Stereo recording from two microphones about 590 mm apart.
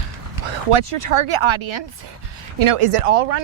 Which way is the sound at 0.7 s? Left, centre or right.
Right.